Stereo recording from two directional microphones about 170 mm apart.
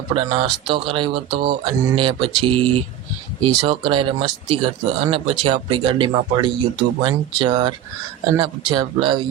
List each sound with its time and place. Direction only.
0.1 s speech: 30° right (ahead or behind)